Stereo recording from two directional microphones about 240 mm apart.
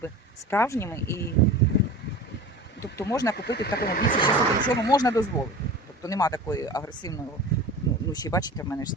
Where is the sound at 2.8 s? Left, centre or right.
Centre.